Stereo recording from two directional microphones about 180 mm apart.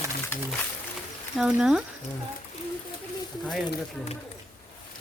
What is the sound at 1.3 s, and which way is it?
Speech, 5° right (ahead or behind).